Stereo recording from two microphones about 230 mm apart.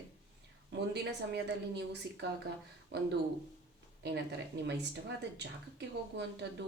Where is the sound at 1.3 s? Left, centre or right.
Right.